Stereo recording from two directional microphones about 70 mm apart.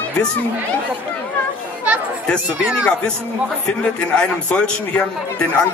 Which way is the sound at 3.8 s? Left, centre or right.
Centre.